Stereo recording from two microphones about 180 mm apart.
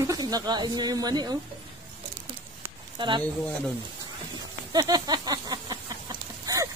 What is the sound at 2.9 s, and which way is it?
Speech, 25° right (ahead or behind).